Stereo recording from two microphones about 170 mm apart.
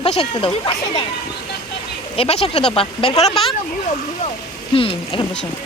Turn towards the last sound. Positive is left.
turn(degrees=30)  # may be behind; listen again after turning